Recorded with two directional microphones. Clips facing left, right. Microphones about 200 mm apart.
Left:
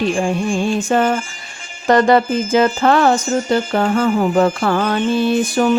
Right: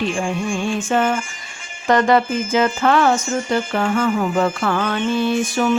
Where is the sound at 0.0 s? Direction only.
35° left (ahead or behind).